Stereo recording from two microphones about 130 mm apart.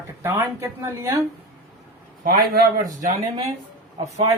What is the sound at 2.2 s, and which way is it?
Speech, 90° right.